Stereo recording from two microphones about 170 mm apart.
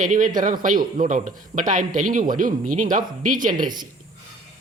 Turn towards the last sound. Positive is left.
turn(degrees=-50)  # may be behind; listen again after turning